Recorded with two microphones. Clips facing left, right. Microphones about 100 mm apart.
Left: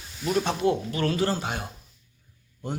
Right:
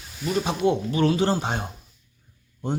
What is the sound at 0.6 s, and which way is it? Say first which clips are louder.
A man's voice: right 3 dB; 20° right (ahead or behind).